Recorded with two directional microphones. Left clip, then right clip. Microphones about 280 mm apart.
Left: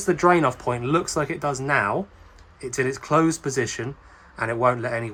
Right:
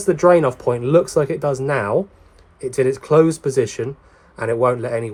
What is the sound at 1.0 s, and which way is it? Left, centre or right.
Speech, centre.